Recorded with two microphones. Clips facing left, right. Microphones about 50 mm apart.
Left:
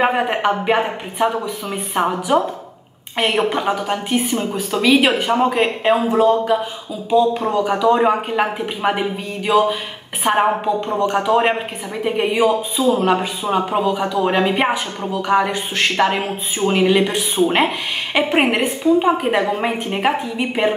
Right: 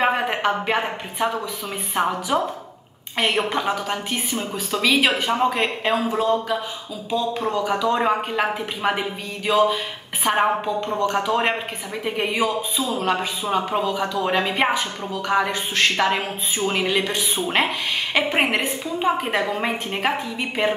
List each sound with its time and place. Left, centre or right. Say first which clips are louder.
0.0 s speech: left 3 dB; centre
4.2 s a woman's voice: left 6 dB; left
17.5 s speech: left 4 dB; centre